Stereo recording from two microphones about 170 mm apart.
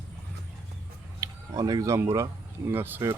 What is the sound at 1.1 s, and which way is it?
Speech, 20° right (ahead or behind).